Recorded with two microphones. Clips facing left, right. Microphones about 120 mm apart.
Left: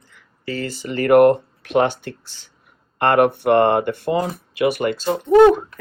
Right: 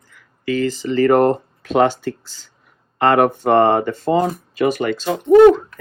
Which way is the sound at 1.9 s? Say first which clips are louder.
Right 7 dB; 60° left (ahead or behind).